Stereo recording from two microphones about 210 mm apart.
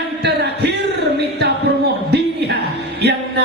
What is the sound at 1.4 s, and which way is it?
Music, 50° right (ahead or behind).